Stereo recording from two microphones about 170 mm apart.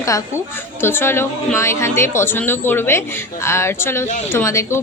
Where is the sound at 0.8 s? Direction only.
15° left (ahead or behind).